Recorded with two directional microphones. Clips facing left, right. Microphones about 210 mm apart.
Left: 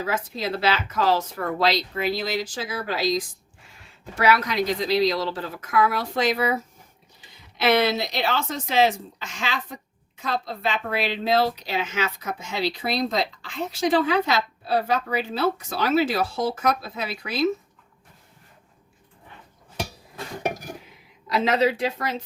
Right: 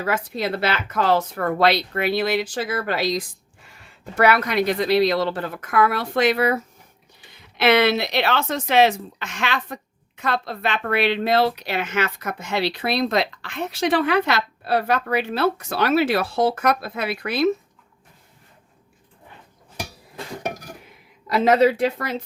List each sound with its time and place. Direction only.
0.0 s speech: 60° right (ahead or behind)
21.2 s speech: 55° right (ahead or behind)